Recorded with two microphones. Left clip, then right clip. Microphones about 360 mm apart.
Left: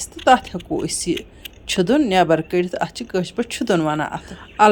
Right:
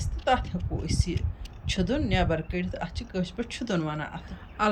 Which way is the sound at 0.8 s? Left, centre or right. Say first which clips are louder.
Left 9 dB; centre.